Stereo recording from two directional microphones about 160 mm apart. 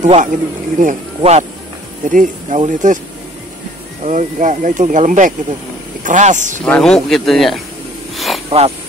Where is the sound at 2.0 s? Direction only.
55° right (ahead or behind).